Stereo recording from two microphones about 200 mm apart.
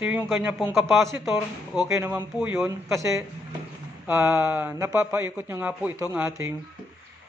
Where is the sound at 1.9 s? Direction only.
10° right (ahead or behind).